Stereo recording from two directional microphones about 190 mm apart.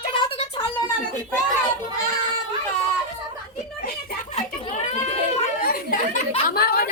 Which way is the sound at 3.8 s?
40° left (ahead or behind).